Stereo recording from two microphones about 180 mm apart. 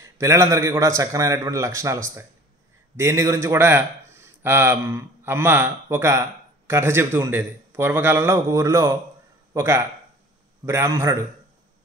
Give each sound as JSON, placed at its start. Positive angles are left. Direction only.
{"t": 0.0, "sound": "a man's voice", "side_deg": -15}
{"t": 3.0, "sound": "a man's voice", "side_deg": -15}